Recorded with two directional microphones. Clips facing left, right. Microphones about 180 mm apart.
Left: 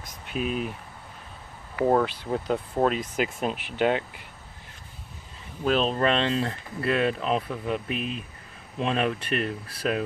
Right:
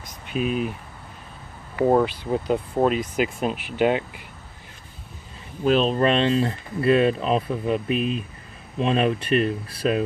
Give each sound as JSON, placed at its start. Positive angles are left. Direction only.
{"t": 0.0, "sound": "a sound", "side_deg": 0}
{"t": 1.9, "sound": "speech", "side_deg": -10}
{"t": 5.7, "sound": "speech", "side_deg": 0}
{"t": 7.1, "sound": "speech", "side_deg": -30}
{"t": 8.8, "sound": "speech", "side_deg": -30}
{"t": 9.8, "sound": "speech", "side_deg": -15}